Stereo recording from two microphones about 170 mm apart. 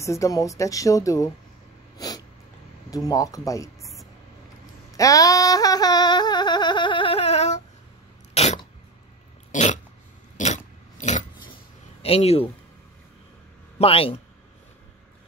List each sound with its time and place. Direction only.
0.0 s speech: 20° left (ahead or behind)
2.0 s sneeze: 20° left (ahead or behind)
2.9 s speech: 20° left (ahead or behind)
4.9 s yodeling: 20° left (ahead or behind); by 7.6 s 40° left (ahead or behind)
8.4 s throat clearing: 40° left (ahead or behind)
10.3 s a sound: 45° left (ahead or behind)
12.0 s speech: 35° left (ahead or behind)
13.7 s a man's voice: 35° left (ahead or behind)